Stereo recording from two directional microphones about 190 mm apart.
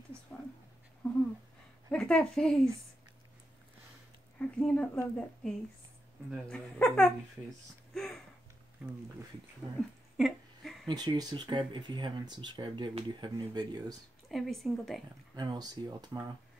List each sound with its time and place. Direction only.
1.9 s a woman's voice: 5° left (ahead or behind)
4.4 s a woman's voice: 5° left (ahead or behind)
7.9 s a sound: centre (ahead or behind)
9.8 s a sound: centre (ahead or behind)
10.9 s speech: 20° right (ahead or behind)
14.3 s a woman's voice: centre (ahead or behind)
15.3 s speech: 20° right (ahead or behind)